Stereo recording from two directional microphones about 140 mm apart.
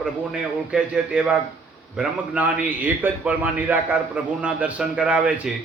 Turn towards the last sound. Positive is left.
turn(degrees=-5)  # may be behind; listen again after turning